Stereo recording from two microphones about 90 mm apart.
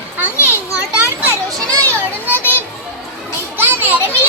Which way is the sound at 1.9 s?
25° left (ahead or behind).